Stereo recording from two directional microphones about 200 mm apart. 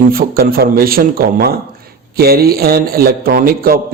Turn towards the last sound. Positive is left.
turn(degrees=-50)  # may be behind; listen again after turning